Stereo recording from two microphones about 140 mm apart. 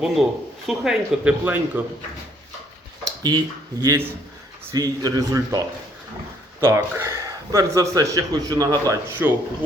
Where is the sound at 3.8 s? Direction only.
25° right (ahead or behind).